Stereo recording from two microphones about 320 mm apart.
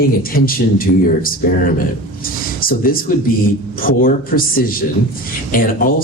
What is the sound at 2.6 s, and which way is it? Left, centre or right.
Speech, left.